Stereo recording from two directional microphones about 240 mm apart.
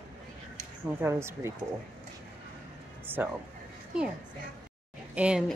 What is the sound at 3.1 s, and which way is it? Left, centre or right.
Speech, centre.